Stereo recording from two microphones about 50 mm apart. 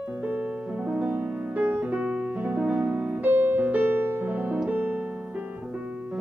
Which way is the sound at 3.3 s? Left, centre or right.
Right.